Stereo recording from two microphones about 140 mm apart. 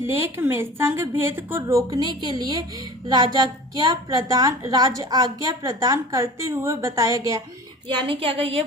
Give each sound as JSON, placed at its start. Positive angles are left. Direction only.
{"t": 0.0, "sound": "a woman's voice", "side_deg": -15}
{"t": 7.9, "sound": "a woman's voice", "side_deg": -40}